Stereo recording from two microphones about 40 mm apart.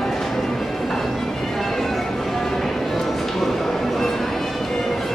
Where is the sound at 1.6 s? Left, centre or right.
Centre.